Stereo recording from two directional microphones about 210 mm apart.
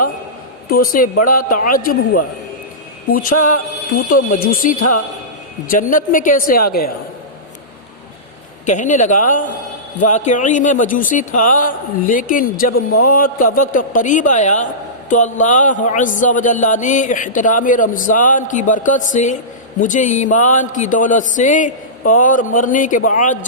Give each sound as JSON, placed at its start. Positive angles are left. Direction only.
{"t": 0.7, "sound": "speech", "side_deg": 45}
{"t": 3.1, "sound": "speech", "side_deg": 40}
{"t": 8.6, "sound": "speech", "side_deg": 35}